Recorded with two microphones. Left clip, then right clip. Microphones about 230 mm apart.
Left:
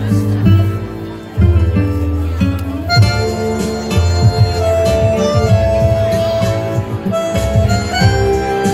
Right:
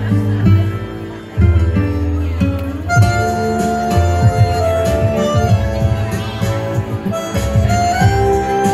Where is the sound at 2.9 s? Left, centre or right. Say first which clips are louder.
Even; right.